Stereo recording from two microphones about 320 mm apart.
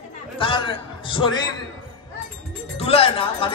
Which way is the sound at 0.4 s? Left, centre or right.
Centre.